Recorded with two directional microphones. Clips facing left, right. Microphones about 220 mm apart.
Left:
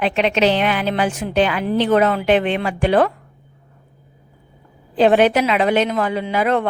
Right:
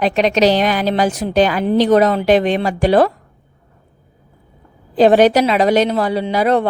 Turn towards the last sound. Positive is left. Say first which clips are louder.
# right 3 dB
turn(degrees=-35)  # may be behind; listen again after turning